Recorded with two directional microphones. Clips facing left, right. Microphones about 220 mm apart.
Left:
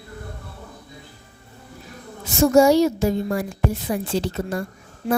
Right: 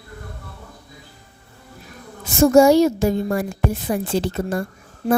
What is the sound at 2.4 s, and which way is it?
Speech, 50° right (ahead or behind).